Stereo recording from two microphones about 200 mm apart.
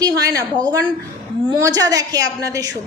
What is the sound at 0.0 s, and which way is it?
Speech, 15° right (ahead or behind).